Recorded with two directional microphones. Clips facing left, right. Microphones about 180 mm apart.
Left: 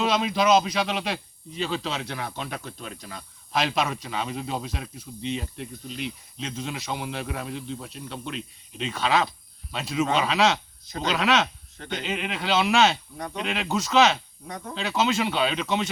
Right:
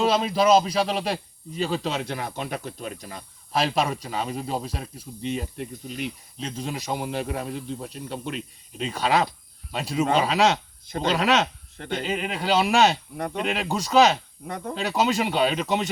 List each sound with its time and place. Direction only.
0.0 s speech: 35° right (ahead or behind); by 6.1 s 50° right (ahead or behind)
6.4 s a man's voice: 40° right (ahead or behind)
13.1 s a man's voice: 50° right (ahead or behind)